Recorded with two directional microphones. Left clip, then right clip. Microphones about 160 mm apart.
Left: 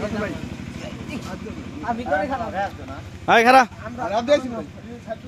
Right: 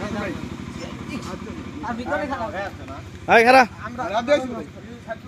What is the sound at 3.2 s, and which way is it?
Speech, 30° left (ahead or behind).